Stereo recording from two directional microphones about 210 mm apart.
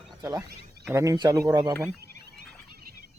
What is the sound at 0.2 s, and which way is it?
Speech, 15° right (ahead or behind).